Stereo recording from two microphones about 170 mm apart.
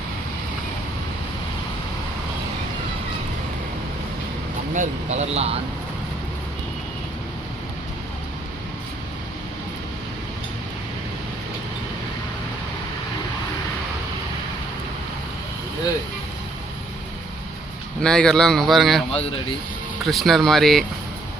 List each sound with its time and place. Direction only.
4.7 s speech: 45° right (ahead or behind)
18.0 s speech: 5° left (ahead or behind)
20.1 s speech: centre (ahead or behind)